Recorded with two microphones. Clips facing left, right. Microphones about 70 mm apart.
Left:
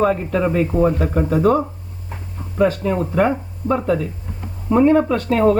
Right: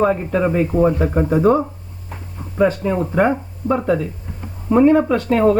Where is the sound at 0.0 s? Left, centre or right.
Centre.